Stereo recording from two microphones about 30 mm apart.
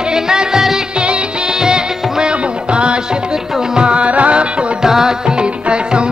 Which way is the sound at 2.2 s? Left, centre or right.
Right.